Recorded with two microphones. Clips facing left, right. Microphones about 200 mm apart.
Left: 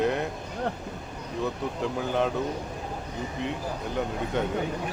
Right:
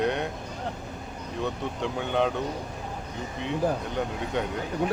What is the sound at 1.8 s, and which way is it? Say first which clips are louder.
Speech: right 1 dB; centre (ahead or behind).